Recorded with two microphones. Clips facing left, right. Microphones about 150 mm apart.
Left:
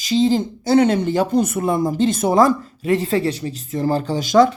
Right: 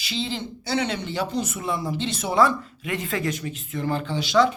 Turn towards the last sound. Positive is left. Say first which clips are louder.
# left 6 dB
turn(degrees=45)  # may be behind; listen again after turning